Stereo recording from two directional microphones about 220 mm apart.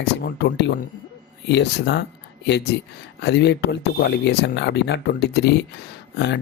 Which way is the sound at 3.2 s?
50° left (ahead or behind).